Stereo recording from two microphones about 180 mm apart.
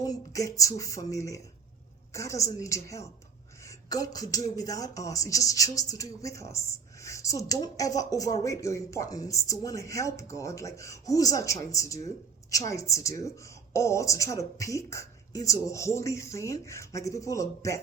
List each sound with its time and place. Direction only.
0.0 s speech: 20° left (ahead or behind)